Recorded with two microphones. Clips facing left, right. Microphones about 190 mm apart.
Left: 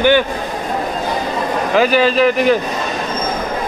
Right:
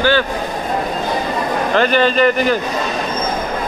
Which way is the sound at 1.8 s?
5° left (ahead or behind).